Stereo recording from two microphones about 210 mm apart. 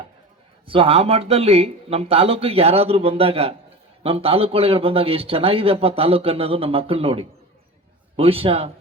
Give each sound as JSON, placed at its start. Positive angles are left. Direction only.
{"t": 0.7, "sound": "speech", "side_deg": -25}